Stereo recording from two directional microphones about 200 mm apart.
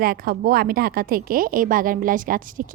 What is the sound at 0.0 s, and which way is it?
A woman's voice, 50° right (ahead or behind).